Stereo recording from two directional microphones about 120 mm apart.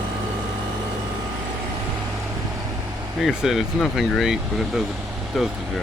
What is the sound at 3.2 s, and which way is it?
Speech, centre (ahead or behind).